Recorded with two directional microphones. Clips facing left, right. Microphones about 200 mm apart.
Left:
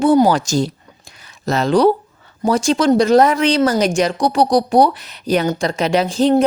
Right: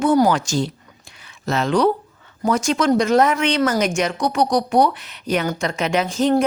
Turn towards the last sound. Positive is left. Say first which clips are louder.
# left 4 dB
turn(degrees=30)  # may be behind; listen again after turning